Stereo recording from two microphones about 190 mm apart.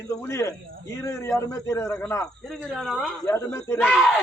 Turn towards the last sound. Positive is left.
turn(degrees=0)  # may be behind; listen again after turning